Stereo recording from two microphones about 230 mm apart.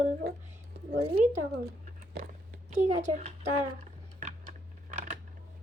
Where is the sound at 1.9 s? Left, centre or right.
Right.